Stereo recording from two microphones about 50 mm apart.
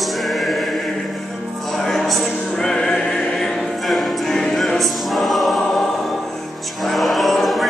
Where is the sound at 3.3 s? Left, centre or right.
Centre.